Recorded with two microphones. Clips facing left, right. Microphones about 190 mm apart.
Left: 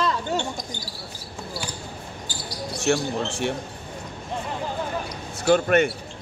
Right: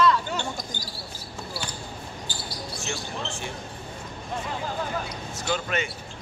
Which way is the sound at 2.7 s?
75° left (ahead or behind).